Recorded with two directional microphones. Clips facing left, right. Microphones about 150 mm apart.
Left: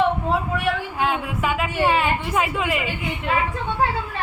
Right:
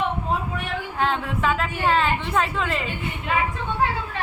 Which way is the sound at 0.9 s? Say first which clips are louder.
Left 1 dB; 10° left (ahead or behind).